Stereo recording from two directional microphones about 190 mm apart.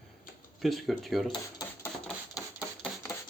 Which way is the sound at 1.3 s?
20° left (ahead or behind).